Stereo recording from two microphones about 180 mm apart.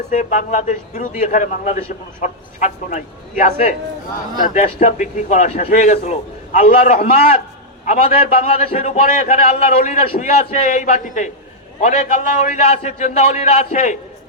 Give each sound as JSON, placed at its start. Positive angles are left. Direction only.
{"t": 0.1, "sound": "a man's voice", "side_deg": 45}